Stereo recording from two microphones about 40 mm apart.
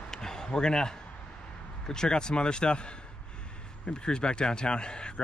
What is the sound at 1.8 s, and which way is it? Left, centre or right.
A man's voice, centre.